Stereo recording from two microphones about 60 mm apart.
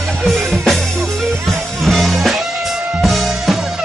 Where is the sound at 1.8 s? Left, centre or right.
Centre.